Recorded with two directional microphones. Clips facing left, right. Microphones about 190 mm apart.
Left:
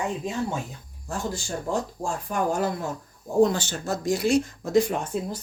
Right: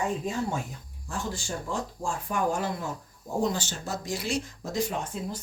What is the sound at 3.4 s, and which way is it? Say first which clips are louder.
Speech: left 7 dB; 60° left (ahead or behind).